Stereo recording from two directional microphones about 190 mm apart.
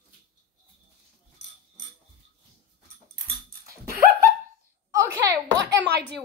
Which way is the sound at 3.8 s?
50° right (ahead or behind).